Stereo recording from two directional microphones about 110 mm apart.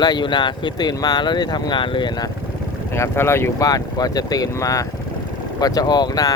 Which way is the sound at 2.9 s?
25° left (ahead or behind).